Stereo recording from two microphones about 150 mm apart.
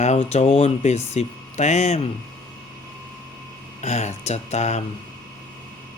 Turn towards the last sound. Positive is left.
turn(degrees=50)  # may be behind; listen again after turning